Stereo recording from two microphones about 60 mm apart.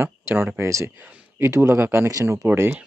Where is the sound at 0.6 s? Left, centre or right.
Right.